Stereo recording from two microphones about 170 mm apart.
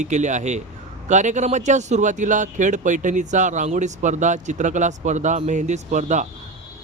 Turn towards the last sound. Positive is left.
turn(degrees=-45)  # may be behind; listen again after turning